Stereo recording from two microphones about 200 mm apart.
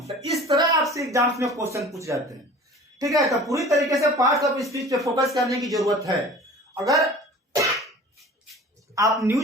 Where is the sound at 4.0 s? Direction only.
15° right (ahead or behind).